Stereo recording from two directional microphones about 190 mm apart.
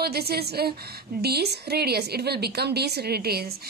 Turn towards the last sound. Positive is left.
turn(degrees=-55)  # may be behind; listen again after turning